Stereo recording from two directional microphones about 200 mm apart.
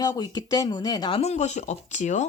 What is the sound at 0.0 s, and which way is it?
Speech, 20° left (ahead or behind).